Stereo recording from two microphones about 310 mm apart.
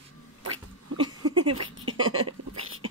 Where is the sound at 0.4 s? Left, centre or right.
Right.